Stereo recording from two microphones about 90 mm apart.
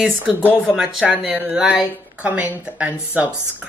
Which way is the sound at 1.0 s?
15° right (ahead or behind).